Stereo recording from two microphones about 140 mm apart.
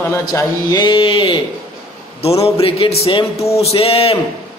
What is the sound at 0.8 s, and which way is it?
Speech, 40° left (ahead or behind).